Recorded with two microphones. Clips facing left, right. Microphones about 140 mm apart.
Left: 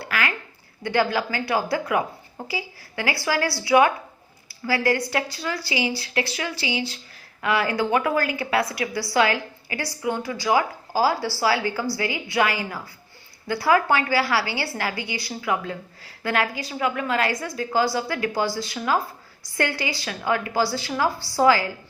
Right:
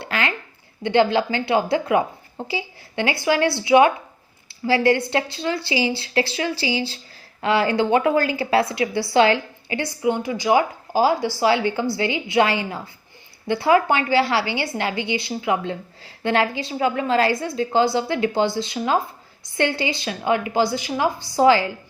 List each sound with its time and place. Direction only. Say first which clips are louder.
0.0 s a woman's voice: right 2 dB; 25° right (ahead or behind)